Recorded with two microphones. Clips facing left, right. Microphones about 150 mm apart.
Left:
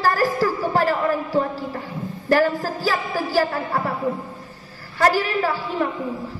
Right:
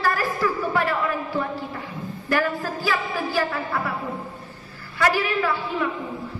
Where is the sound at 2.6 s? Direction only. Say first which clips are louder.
Left 2 dB; 35° left (ahead or behind).